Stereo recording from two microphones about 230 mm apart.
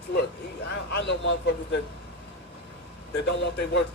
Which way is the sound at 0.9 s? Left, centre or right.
Left.